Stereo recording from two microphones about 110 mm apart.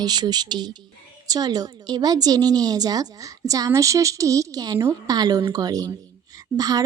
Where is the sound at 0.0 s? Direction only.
40° right (ahead or behind).